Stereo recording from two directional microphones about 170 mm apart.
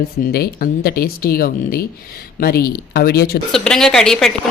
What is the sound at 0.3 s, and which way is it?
Speech, 60° left (ahead or behind).